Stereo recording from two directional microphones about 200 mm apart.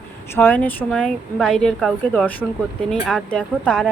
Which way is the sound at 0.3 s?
10° left (ahead or behind).